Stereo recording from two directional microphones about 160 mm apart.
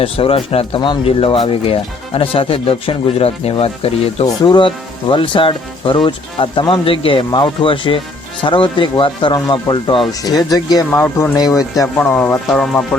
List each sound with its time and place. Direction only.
0.0 s speech: 35° left (ahead or behind)
11.9 s speech: 10° left (ahead or behind)